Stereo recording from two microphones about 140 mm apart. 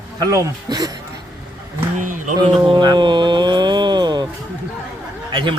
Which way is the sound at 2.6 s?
30° right (ahead or behind).